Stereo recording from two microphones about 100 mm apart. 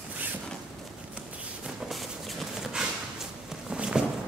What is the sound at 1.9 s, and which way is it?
Horse, centre (ahead or behind).